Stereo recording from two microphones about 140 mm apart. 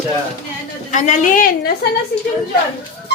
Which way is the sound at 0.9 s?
60° left (ahead or behind).